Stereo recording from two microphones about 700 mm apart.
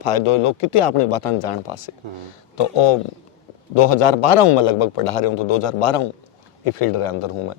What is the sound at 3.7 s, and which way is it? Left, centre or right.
Speech, left.